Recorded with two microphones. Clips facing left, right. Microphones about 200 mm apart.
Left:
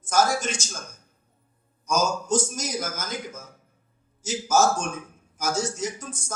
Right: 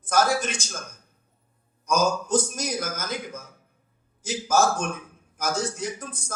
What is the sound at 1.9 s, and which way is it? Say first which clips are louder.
Speech: right 1 dB; 60° right (ahead or behind).